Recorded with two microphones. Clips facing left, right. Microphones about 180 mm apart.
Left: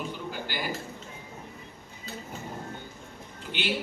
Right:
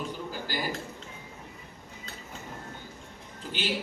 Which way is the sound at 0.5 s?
40° right (ahead or behind).